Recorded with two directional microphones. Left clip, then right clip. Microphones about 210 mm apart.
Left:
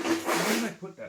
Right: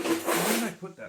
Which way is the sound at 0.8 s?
5° left (ahead or behind).